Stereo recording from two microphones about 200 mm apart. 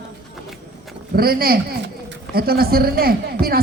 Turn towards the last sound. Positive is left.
turn(degrees=-50)  # may be behind; listen again after turning